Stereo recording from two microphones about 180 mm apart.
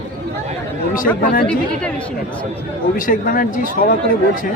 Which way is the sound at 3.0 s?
50° left (ahead or behind).